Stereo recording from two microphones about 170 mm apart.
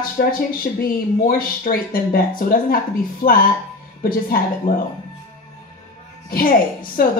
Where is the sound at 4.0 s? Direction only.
55° left (ahead or behind).